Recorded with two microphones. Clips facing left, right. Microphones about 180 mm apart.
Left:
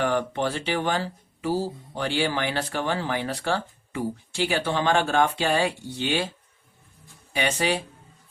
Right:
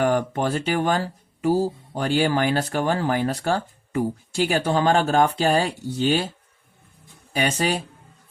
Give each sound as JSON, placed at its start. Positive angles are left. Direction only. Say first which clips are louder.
{"t": 0.0, "sound": "speech", "louder": "right 3 dB", "side_deg": -45}
{"t": 7.3, "sound": "speech", "louder": "right 2 dB", "side_deg": -40}